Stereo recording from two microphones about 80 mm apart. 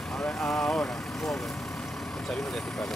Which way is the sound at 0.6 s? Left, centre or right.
Centre.